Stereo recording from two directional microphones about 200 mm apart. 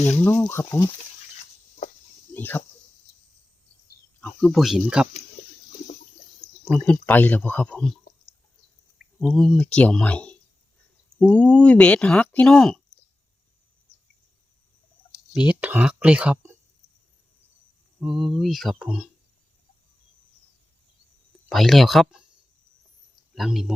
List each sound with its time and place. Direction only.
0.2 s speech: 10° left (ahead or behind)
2.3 s speech: 10° left (ahead or behind)
4.2 s speech: 5° left (ahead or behind)
5.4 s water: 40° left (ahead or behind)
6.7 s speech: 5° left (ahead or behind)
9.1 s speech: centre (ahead or behind)
15.3 s speech: 5° right (ahead or behind)
18.0 s speech: 5° right (ahead or behind)
21.5 s speech: centre (ahead or behind)
23.3 s speech: centre (ahead or behind)